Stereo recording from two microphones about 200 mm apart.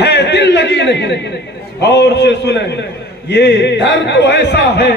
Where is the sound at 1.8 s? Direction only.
55° left (ahead or behind).